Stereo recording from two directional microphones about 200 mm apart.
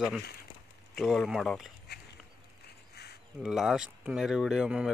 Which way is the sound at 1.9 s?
55° left (ahead or behind).